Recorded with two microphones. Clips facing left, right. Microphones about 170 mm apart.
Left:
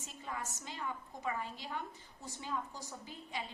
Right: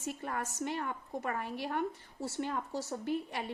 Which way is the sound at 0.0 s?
60° right (ahead or behind).